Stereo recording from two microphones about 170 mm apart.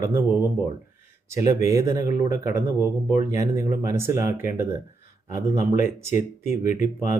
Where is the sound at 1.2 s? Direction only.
15° right (ahead or behind).